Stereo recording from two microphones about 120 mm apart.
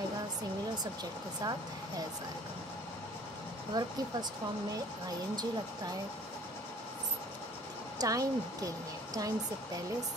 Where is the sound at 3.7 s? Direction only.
35° right (ahead or behind).